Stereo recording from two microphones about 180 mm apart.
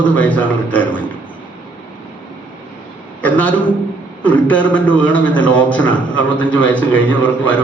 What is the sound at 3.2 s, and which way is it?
A man's voice, 10° left (ahead or behind).